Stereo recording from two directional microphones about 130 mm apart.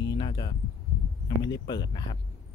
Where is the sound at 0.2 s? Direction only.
35° left (ahead or behind).